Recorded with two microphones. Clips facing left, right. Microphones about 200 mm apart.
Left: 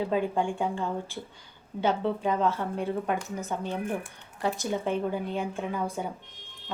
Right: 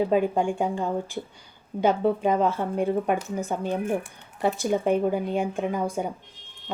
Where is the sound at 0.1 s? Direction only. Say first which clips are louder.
Right 5 dB; 15° right (ahead or behind).